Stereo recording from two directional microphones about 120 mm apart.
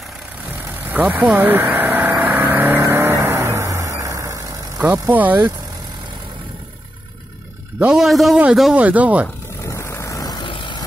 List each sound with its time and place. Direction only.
0.8 s vehicle: 15° right (ahead or behind); by 4.8 s 30° right (ahead or behind)
5.1 s speech: 15° right (ahead or behind)
7.8 s a man's voice: 5° right (ahead or behind)
9.6 s vehicle: 20° left (ahead or behind); by 10.8 s 40° left (ahead or behind)